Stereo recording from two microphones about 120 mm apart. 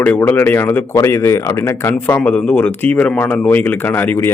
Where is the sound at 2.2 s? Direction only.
10° left (ahead or behind).